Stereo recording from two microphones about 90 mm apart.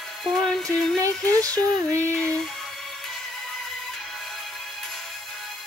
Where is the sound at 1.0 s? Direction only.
40° right (ahead or behind).